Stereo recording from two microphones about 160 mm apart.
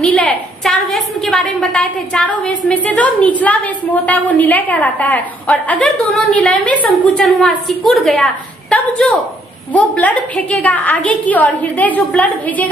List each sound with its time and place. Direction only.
0.0 s a woman's voice: 5° left (ahead or behind)